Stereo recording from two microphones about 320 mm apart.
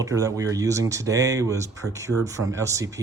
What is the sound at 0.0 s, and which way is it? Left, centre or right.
Speech, centre.